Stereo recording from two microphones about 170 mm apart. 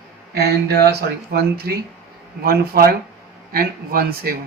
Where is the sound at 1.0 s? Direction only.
70° right (ahead or behind).